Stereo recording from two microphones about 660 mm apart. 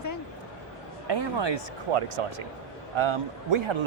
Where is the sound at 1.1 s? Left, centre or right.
Right.